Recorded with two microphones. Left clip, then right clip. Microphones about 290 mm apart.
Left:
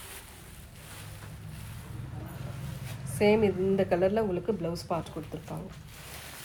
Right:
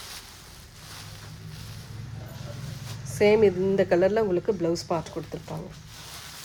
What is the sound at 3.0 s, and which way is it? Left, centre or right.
Speech, right.